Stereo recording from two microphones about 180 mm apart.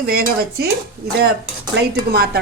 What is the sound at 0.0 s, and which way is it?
Speech, 60° right (ahead or behind).